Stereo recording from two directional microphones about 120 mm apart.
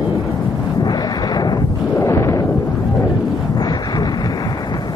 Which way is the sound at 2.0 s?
25° left (ahead or behind).